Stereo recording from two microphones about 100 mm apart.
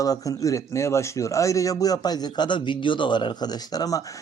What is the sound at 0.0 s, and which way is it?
A man's voice, 35° left (ahead or behind).